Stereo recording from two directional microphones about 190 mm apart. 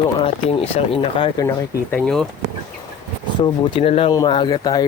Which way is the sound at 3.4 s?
25° left (ahead or behind).